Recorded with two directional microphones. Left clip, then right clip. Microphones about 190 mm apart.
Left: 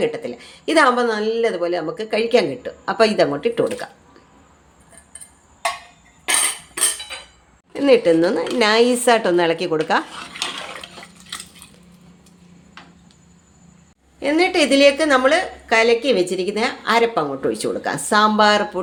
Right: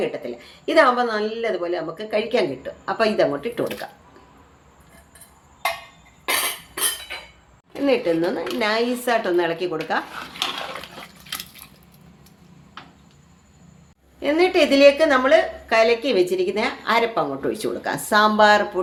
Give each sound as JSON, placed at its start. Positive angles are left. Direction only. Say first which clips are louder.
{"t": 0.0, "sound": "speech", "louder": "left 4 dB", "side_deg": 35}
{"t": 7.8, "sound": "speech", "louder": "left 6 dB", "side_deg": 35}
{"t": 14.2, "sound": "a woman's voice", "louder": "left 1 dB", "side_deg": 30}